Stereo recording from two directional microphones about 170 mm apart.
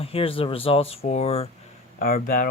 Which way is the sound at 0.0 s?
35° left (ahead or behind).